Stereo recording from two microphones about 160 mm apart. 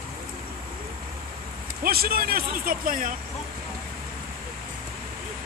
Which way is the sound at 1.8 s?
70° right (ahead or behind).